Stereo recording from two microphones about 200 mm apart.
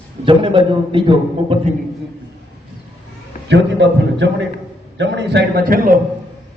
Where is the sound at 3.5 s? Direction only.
60° right (ahead or behind).